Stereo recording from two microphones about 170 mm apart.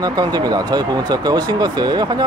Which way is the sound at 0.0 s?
25° right (ahead or behind).